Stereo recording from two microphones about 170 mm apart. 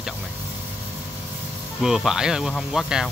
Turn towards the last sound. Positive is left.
turn(degrees=-5)  # may be behind; listen again after turning